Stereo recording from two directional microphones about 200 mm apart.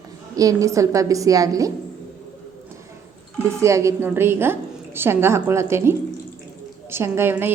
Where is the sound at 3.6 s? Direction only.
15° right (ahead or behind).